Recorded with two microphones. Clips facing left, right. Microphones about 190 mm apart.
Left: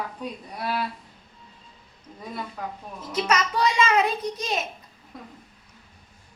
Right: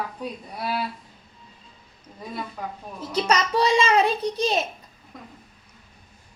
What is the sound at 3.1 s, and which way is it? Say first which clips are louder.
A woman's voice: right 2 dB; 30° right (ahead or behind).